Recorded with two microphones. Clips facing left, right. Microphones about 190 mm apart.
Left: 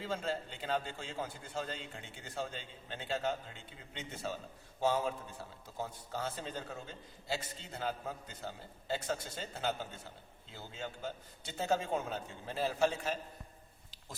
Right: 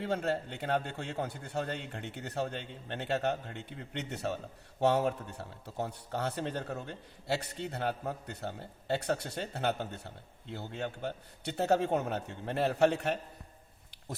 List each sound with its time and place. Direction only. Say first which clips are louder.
0.0 s a man's voice: right 5 dB; 65° right (ahead or behind)